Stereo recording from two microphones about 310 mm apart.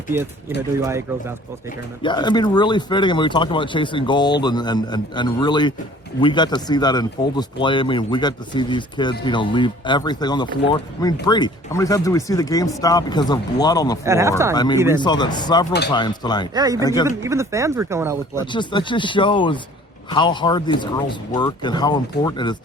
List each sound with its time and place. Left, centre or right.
0.1 s speech: centre
2.0 s speech: centre
14.0 s speech: centre
14.5 s speech: centre
17.2 s speech: centre
18.5 s speech: centre